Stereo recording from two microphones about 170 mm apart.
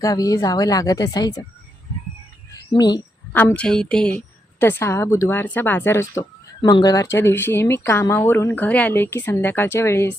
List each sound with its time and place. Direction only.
0.0 s a woman's voice: 20° left (ahead or behind)
2.7 s a woman's voice: 25° left (ahead or behind)
3.3 s a woman's voice: 5° left (ahead or behind)